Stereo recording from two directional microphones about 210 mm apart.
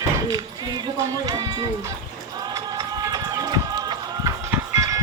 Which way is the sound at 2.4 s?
20° right (ahead or behind).